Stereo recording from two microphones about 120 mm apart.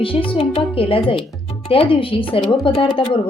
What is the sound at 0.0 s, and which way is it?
Speech, 45° left (ahead or behind).